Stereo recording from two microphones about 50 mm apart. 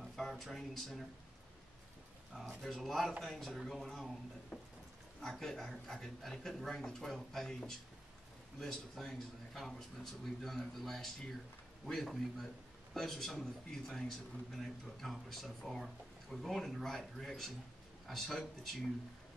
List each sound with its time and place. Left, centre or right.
0.1 s speech: centre
2.3 s a man's voice: centre
4.5 s speech: left
5.2 s a man's voice: centre